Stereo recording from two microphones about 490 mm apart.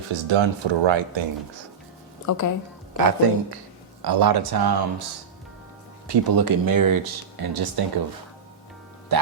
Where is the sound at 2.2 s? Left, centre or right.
Left.